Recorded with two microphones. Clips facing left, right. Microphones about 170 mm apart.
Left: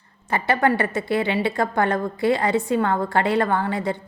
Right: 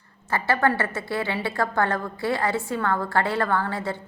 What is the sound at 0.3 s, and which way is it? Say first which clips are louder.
A woman's voice: left 2 dB; 20° left (ahead or behind).